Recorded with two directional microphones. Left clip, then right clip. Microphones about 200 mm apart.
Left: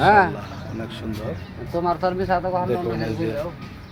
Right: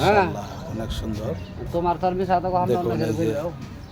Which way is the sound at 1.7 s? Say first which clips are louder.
Even; 15° left (ahead or behind).